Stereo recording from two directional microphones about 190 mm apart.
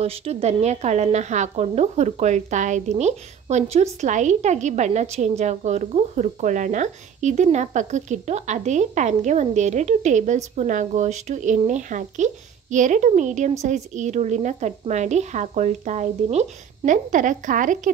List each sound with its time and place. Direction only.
0.0 s speech: 30° right (ahead or behind)